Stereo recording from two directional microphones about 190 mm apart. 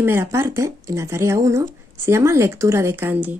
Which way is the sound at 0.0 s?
15° right (ahead or behind).